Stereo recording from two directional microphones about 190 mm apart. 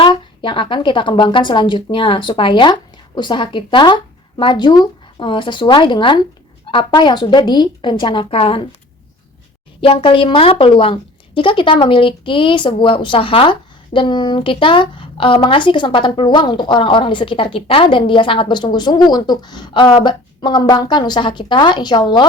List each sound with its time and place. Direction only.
0.0 s speech: 25° left (ahead or behind)
9.8 s speech: 30° left (ahead or behind)